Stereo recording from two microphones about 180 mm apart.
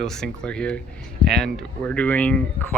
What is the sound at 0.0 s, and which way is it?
Speech, 5° left (ahead or behind).